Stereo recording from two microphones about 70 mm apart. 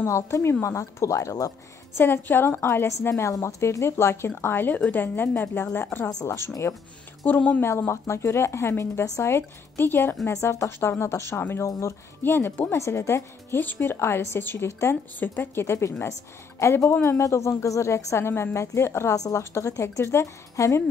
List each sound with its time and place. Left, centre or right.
0.0 s a woman's voice: left
2.0 s a woman's voice: left
7.2 s speech: left
7.6 s a woman's voice: left
9.0 s a woman's voice: left
9.3 s a woman's voice: left
10.2 s a woman's voice: left
13.6 s a woman's voice: left
19.1 s a woman's voice: left
19.5 s a woman's voice: left